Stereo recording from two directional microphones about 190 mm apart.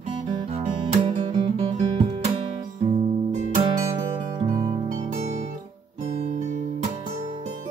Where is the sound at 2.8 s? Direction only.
30° right (ahead or behind).